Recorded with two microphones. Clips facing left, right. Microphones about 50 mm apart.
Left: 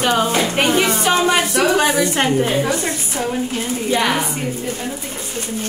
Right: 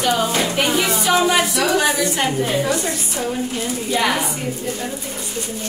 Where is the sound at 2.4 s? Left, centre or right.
Left.